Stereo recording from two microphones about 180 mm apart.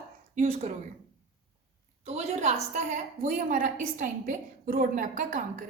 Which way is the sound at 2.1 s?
35° right (ahead or behind).